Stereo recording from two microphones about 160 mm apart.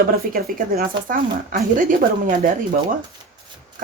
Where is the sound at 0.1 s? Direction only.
65° right (ahead or behind).